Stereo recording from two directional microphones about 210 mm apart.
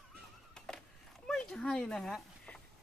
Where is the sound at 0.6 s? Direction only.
5° left (ahead or behind).